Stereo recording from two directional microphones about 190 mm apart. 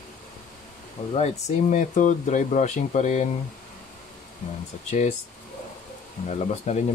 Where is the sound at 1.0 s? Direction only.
35° left (ahead or behind).